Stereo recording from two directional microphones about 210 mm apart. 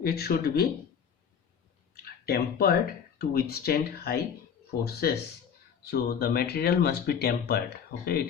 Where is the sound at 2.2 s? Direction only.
45° left (ahead or behind).